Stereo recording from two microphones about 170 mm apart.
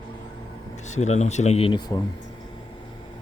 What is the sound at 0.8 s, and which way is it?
Speech, 45° left (ahead or behind).